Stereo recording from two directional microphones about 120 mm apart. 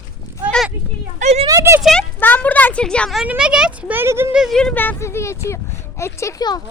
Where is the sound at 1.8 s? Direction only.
5° left (ahead or behind).